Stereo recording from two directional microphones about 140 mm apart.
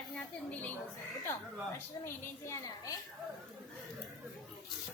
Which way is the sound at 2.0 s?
20° left (ahead or behind).